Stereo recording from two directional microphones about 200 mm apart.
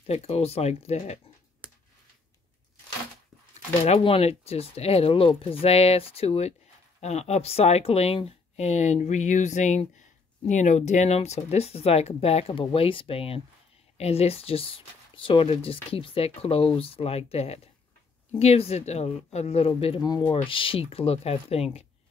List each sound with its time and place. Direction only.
0.0 s speech: 30° left (ahead or behind)
1.6 s a sound: 5° right (ahead or behind)
3.8 s speech: 30° left (ahead or behind)